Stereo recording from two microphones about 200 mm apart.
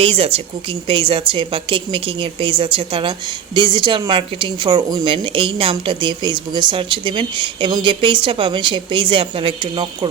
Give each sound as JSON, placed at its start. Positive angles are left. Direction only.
{"t": 0.0, "sound": "a woman's voice", "side_deg": -30}